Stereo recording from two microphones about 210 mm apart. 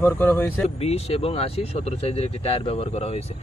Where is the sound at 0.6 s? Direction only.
30° left (ahead or behind).